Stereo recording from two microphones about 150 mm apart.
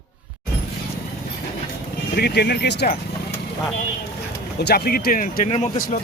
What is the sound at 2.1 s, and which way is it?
Speech, 90° left.